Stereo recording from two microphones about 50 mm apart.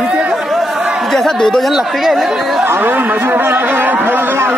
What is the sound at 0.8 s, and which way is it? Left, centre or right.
Chatter, centre.